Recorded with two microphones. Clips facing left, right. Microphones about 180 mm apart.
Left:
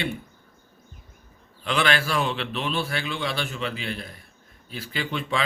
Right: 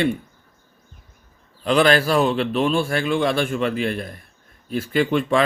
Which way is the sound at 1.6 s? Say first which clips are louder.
Right 8 dB; 40° right (ahead or behind).